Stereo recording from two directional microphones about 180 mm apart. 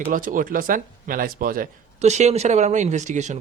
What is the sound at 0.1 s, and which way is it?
Speech, 50° right (ahead or behind).